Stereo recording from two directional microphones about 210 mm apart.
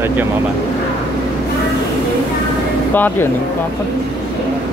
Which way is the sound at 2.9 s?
10° left (ahead or behind).